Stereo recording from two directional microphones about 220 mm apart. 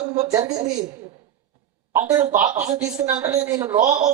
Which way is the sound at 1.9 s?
15° right (ahead or behind).